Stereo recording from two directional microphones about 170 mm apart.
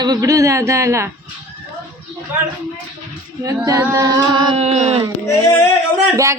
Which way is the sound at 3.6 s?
20° right (ahead or behind).